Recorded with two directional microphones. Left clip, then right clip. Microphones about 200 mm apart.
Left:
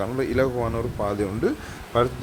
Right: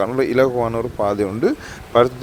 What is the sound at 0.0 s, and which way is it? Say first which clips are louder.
Speech: right 7 dB; 40° right (ahead or behind).